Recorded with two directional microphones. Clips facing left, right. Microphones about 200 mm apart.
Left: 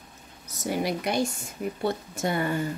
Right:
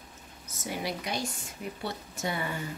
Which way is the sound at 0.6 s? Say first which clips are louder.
Left 7 dB; 50° left (ahead or behind).